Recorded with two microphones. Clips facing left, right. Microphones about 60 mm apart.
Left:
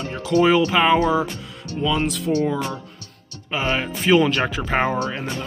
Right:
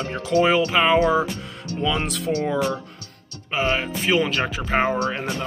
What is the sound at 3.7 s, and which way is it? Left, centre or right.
Speech, centre.